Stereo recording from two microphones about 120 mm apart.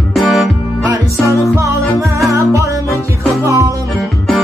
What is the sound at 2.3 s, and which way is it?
Music, 25° right (ahead or behind).